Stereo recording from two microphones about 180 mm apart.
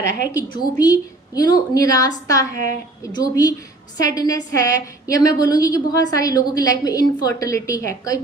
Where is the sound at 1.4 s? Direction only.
20° left (ahead or behind).